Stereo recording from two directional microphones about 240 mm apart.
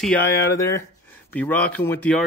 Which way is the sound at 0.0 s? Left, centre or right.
Centre.